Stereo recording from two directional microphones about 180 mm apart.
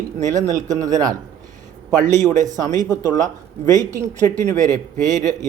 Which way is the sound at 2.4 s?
20° right (ahead or behind).